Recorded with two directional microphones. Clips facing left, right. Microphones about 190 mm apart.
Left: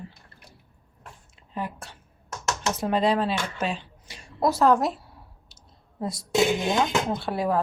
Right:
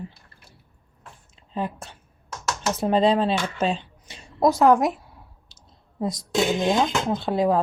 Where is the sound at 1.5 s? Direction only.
20° right (ahead or behind).